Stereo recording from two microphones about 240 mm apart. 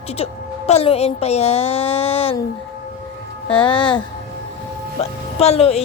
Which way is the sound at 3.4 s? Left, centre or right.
Left.